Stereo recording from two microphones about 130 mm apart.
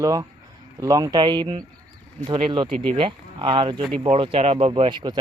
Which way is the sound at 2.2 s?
45° right (ahead or behind).